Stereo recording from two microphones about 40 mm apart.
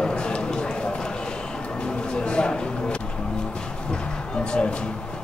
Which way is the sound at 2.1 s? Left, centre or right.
Left.